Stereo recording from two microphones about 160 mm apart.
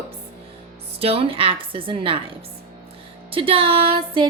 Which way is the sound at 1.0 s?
35° right (ahead or behind).